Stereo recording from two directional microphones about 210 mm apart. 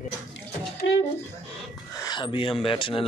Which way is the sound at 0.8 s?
60° left (ahead or behind).